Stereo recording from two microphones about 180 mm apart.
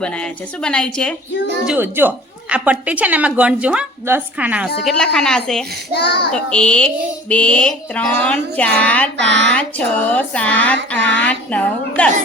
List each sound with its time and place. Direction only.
0.0 s a woman's voice: 5° left (ahead or behind)
1.6 s a woman's voice: 10° right (ahead or behind)
5.9 s a child's voice: 65° left (ahead or behind)
6.3 s music: 5° left (ahead or behind)
9.1 s speech: 80° right
9.5 s music: 5° left (ahead or behind)